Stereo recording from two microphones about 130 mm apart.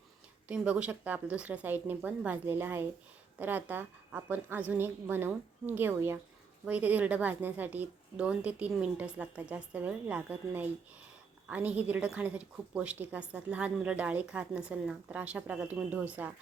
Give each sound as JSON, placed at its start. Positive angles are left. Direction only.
{"t": 0.4, "sound": "a woman's voice", "side_deg": -10}